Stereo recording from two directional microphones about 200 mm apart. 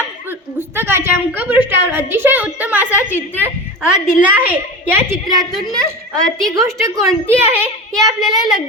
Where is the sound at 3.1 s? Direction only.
10° left (ahead or behind).